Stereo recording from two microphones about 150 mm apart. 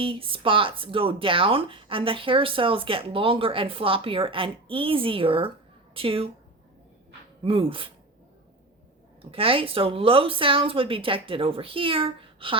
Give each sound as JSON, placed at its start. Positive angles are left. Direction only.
{"t": 0.0, "sound": "speech", "side_deg": -35}
{"t": 7.4, "sound": "speech", "side_deg": -35}
{"t": 9.3, "sound": "speech", "side_deg": -35}